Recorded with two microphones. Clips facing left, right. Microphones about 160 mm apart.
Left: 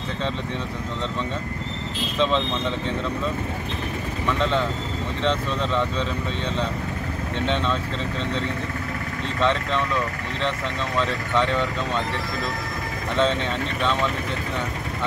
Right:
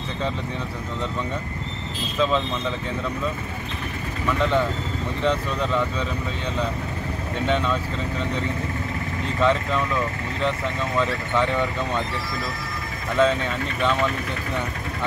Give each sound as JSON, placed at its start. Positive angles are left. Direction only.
{"t": 4.4, "sound": "speech", "side_deg": -10}
{"t": 7.4, "sound": "speech", "side_deg": -10}
{"t": 11.0, "sound": "speech", "side_deg": -15}
{"t": 13.2, "sound": "speech", "side_deg": -10}